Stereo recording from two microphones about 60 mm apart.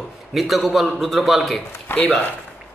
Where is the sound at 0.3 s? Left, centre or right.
Centre.